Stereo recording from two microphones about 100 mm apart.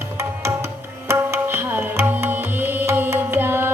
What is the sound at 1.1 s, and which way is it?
Tabla, 25° right (ahead or behind).